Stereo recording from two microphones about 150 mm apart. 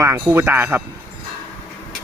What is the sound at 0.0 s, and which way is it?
Speech, 20° right (ahead or behind).